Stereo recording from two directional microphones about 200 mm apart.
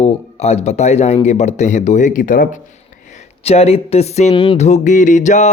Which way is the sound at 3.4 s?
30° left (ahead or behind).